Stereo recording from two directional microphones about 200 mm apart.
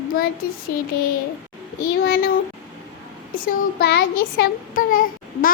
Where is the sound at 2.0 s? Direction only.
50° left (ahead or behind).